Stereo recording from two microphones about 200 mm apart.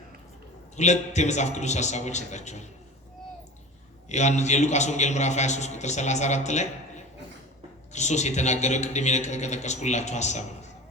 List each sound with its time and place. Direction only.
0.8 s a man's voice: 35° left (ahead or behind)
4.1 s a man's voice: 35° left (ahead or behind)